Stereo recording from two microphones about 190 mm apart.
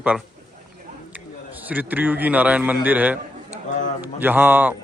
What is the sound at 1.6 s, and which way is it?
Speech, 10° right (ahead or behind).